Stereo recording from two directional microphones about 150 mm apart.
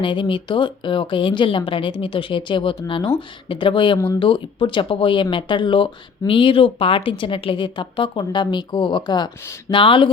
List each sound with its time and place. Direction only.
0.0 s speech: 35° left (ahead or behind)
3.9 s speech: 20° left (ahead or behind)
4.2 s speech: 35° left (ahead or behind)